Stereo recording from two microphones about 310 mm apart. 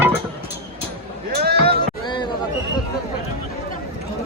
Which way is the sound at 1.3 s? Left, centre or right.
Right.